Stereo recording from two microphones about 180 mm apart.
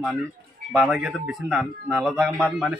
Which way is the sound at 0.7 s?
Centre (ahead or behind).